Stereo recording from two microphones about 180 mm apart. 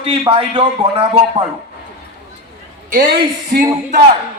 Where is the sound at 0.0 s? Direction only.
30° right (ahead or behind).